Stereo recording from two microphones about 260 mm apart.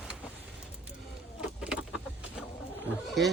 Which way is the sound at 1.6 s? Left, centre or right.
Centre.